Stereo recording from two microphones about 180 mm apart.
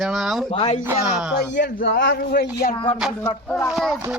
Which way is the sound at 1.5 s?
80° left.